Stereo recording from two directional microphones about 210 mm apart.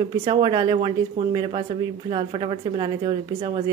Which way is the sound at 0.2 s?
25° right (ahead or behind).